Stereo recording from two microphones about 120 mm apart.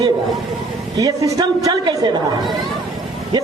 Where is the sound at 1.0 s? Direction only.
30° right (ahead or behind).